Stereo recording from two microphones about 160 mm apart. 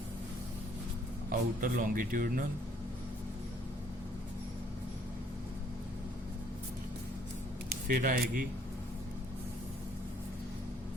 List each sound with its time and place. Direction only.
1.3 s a man's voice: 60° right (ahead or behind)
7.9 s a man's voice: 60° right (ahead or behind)